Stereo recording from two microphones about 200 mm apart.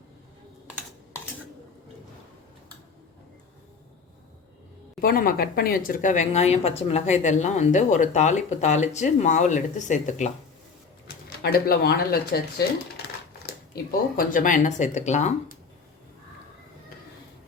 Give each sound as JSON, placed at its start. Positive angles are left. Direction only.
{"t": 4.9, "sound": "speech", "side_deg": 45}
{"t": 11.4, "sound": "speech", "side_deg": 50}
{"t": 14.2, "sound": "speech", "side_deg": 40}